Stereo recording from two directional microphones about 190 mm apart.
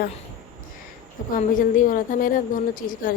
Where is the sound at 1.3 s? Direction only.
45° left (ahead or behind).